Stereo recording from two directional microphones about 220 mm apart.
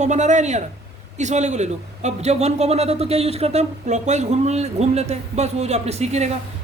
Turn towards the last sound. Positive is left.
turn(degrees=-30)  # may be behind; listen again after turning